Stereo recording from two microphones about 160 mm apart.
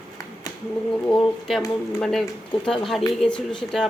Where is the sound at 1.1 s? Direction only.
5° left (ahead or behind).